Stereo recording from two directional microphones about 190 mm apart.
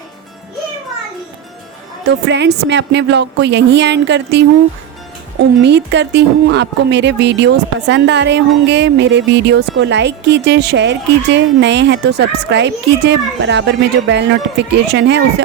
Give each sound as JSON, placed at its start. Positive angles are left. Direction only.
{"t": 2.0, "sound": "a woman's voice", "side_deg": -65}
{"t": 5.6, "sound": "speech", "side_deg": -65}